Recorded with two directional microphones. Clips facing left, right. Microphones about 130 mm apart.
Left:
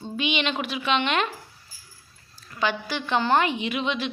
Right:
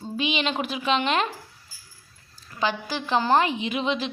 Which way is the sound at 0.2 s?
35° right (ahead or behind).